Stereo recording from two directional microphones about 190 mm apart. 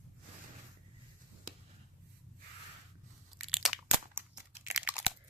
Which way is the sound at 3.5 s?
Centre (ahead or behind).